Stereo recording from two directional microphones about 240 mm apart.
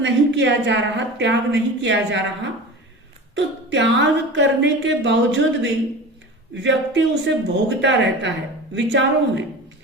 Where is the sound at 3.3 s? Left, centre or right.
Right.